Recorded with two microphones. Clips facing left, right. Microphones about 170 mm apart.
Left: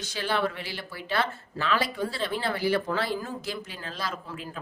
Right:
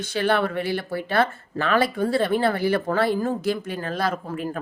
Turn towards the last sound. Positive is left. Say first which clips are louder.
# right 9 dB
turn(degrees=-55)  # may be behind; listen again after turning